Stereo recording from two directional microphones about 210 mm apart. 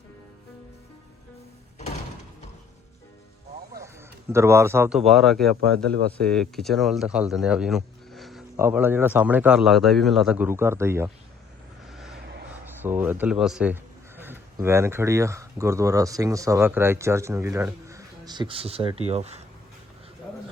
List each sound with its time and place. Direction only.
4.3 s a man's voice: 10° right (ahead or behind)
5.5 s a man's voice: 45° right (ahead or behind)
6.1 s speech: 5° left (ahead or behind)
11.9 s vehicle: centre (ahead or behind)
12.6 s speech: 10° right (ahead or behind); by 19.4 s 30° right (ahead or behind)